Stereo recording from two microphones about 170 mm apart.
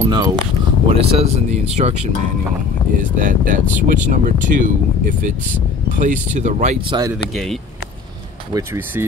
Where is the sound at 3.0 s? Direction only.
50° right (ahead or behind).